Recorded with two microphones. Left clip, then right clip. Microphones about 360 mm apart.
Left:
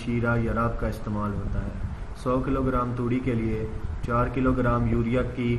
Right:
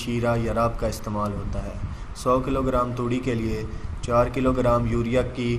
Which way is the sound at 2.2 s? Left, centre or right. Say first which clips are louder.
Right 4 dB; centre.